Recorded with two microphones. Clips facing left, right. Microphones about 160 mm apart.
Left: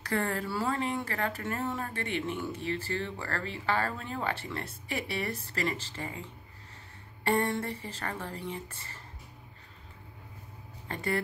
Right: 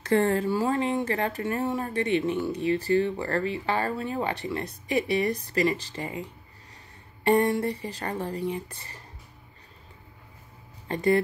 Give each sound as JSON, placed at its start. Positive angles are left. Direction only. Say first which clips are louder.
{"t": 0.0, "sound": "speech", "louder": "right 9 dB", "side_deg": -20}
{"t": 10.9, "sound": "speech", "louder": "right 10 dB", "side_deg": -20}